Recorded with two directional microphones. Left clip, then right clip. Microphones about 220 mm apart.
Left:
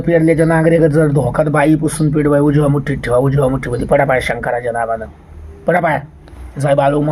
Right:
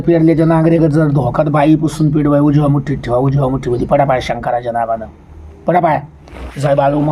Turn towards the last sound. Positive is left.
turn(degrees=20)  # may be behind; listen again after turning